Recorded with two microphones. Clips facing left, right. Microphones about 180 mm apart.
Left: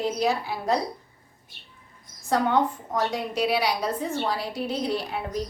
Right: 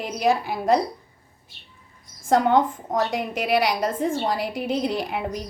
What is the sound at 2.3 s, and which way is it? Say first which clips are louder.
A woman's voice: right 4 dB; 45° right (ahead or behind).